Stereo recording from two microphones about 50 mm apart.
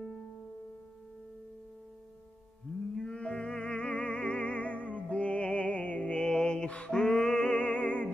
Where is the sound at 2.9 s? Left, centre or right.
Centre.